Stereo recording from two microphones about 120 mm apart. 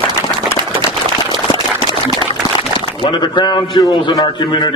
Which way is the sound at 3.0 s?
40° left (ahead or behind).